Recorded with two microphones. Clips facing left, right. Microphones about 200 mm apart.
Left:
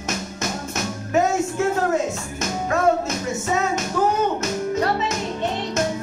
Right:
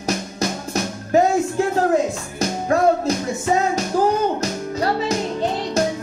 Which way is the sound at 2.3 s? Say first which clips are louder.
Right 5 dB; 35° right (ahead or behind).